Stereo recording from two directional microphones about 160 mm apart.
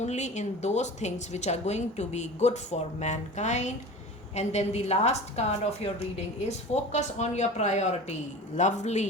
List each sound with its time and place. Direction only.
0.0 s a woman's voice: 45° left (ahead or behind)